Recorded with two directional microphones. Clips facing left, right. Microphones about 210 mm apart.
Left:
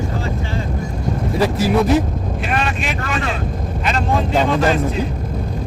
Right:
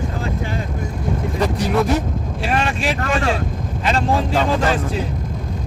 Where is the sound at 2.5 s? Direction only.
30° right (ahead or behind).